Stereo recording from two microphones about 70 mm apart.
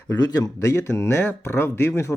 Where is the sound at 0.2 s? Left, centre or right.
Left.